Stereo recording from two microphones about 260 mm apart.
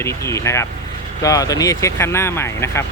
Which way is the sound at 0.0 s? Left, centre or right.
Centre.